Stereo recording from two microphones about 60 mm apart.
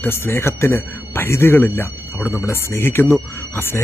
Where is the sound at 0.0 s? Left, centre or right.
Left.